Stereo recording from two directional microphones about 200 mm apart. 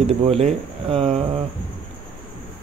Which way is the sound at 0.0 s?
30° right (ahead or behind).